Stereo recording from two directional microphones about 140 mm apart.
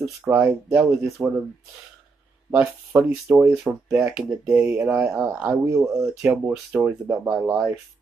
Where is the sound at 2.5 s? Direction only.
15° right (ahead or behind).